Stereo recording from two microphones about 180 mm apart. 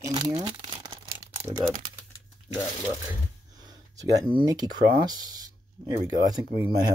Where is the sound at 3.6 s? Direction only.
20° right (ahead or behind).